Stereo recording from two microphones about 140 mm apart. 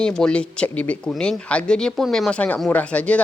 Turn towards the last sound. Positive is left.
turn(degrees=10)  # may be behind; listen again after turning